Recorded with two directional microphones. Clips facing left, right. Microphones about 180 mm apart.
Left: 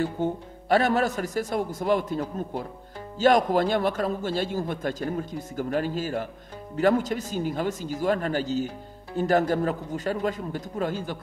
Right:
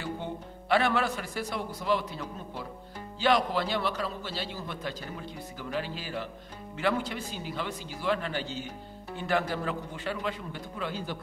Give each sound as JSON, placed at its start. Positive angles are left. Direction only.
{"t": 0.0, "sound": "a man's voice", "side_deg": 45}